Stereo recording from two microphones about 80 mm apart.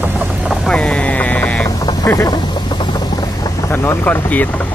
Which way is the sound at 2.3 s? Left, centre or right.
Left.